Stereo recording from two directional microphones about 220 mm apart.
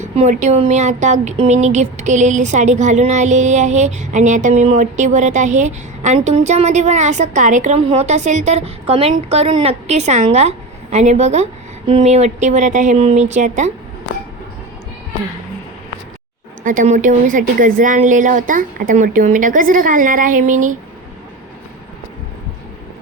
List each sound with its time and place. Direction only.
0.0 s a woman's voice: 30° right (ahead or behind)
16.6 s speech: 35° right (ahead or behind)